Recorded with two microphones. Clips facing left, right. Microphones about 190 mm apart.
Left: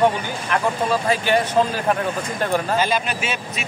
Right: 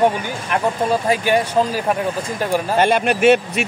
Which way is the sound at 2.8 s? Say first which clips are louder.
Right 7 dB; 65° right (ahead or behind).